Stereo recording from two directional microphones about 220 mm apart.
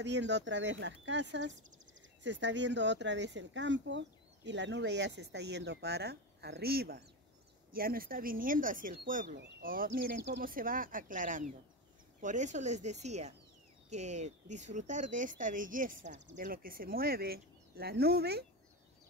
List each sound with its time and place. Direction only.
0.0 s speech: 50° right (ahead or behind)